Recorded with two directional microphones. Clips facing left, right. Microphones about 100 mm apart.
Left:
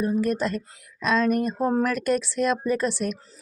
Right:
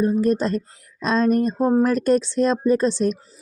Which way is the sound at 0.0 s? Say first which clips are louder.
Right 4 dB; 30° right (ahead or behind).